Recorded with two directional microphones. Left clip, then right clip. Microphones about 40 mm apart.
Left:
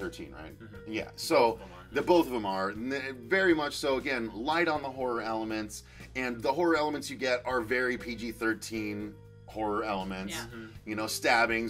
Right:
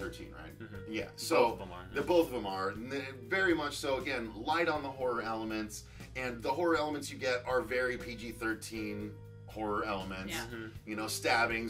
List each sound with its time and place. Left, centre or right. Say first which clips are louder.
0.8 s speech: left 3 dB; left